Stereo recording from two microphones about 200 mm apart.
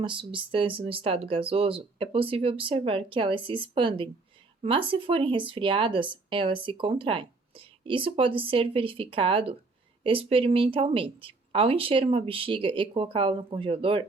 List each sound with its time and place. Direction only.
0.0 s speech: 25° right (ahead or behind)